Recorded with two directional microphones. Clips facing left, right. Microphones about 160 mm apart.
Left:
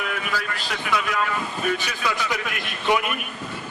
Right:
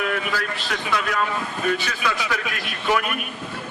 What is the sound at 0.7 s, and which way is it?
Speech, 5° left (ahead or behind).